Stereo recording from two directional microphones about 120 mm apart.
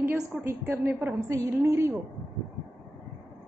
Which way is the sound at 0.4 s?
20° right (ahead or behind).